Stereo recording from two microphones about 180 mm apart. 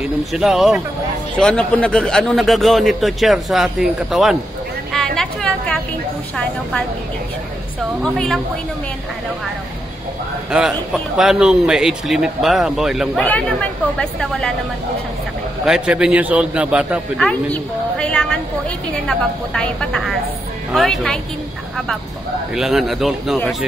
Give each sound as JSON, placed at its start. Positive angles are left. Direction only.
{"t": 0.0, "sound": "a man's voice", "side_deg": 0}
{"t": 4.9, "sound": "a sound", "side_deg": 5}
{"t": 8.0, "sound": "a man's voice", "side_deg": 5}
{"t": 10.5, "sound": "a man's voice", "side_deg": -5}
{"t": 15.6, "sound": "a man's voice", "side_deg": -5}
{"t": 17.3, "sound": "a woman's voice", "side_deg": 5}
{"t": 22.6, "sound": "a man's voice", "side_deg": 0}